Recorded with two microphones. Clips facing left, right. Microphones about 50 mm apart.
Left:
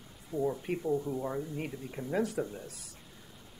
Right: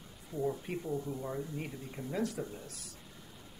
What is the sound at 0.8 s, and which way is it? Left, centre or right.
Speech, centre.